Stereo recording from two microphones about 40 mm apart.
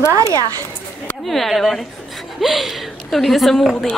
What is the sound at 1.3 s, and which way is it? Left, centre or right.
A woman's voice, centre.